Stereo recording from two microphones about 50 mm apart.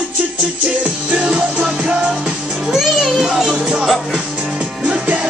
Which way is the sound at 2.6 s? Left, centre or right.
Centre.